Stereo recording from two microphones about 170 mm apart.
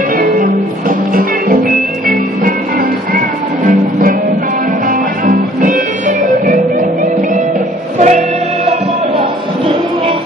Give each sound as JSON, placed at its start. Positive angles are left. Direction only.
{"t": 0.2, "sound": "music", "side_deg": -55}
{"t": 4.8, "sound": "music", "side_deg": -50}
{"t": 8.0, "sound": "music", "side_deg": -40}